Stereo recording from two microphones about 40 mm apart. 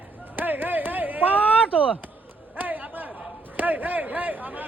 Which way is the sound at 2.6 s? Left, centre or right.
Right.